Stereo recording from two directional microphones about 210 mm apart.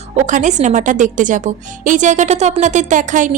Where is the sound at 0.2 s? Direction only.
35° right (ahead or behind).